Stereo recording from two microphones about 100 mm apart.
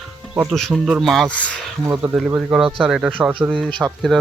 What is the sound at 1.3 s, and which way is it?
Speech, 15° left (ahead or behind).